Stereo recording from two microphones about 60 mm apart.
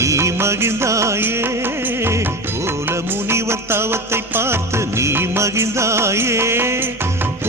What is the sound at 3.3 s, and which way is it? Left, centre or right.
Music of bollywood, right.